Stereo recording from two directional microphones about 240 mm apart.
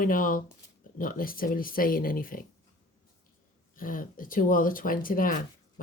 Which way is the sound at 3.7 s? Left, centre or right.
Left.